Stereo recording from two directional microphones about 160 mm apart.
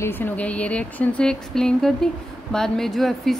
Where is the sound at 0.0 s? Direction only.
10° left (ahead or behind).